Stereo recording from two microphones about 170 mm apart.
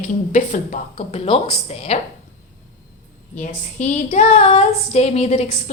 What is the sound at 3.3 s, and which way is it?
Female singing, 45° left (ahead or behind).